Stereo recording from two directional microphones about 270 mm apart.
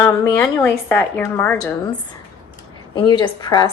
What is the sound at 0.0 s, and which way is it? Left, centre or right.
Speech, centre.